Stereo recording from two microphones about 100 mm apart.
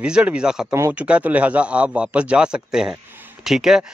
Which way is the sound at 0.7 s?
30° right (ahead or behind).